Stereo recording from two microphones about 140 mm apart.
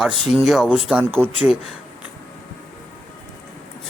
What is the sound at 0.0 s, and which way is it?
Speech, 5° right (ahead or behind).